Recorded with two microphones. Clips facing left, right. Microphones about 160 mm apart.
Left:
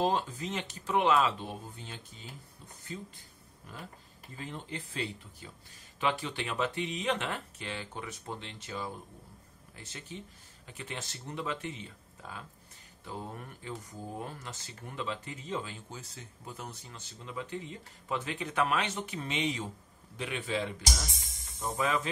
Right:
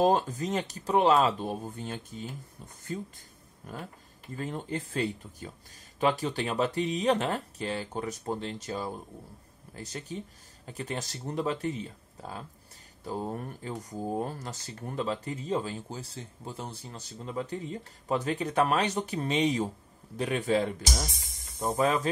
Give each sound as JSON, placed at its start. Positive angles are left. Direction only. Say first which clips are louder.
{"t": 0.0, "sound": "speech", "louder": "right 6 dB", "side_deg": -45}